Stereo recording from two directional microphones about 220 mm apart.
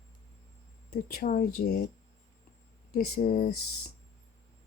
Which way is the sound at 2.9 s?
40° left (ahead or behind).